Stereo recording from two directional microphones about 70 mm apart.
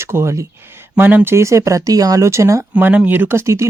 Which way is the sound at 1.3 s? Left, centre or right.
Right.